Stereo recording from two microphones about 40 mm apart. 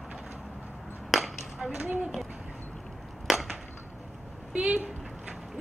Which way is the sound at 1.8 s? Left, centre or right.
Right.